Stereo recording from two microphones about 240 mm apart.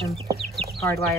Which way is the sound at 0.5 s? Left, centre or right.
Centre.